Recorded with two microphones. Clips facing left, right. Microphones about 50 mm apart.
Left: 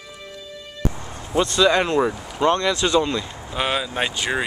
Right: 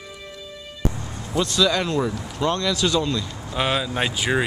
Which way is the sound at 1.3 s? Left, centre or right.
Left.